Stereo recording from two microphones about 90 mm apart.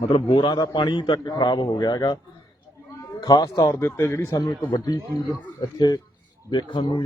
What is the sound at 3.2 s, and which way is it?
Speech, 50° left (ahead or behind).